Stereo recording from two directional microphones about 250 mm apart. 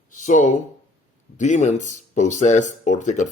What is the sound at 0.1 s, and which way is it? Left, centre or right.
Speech, left.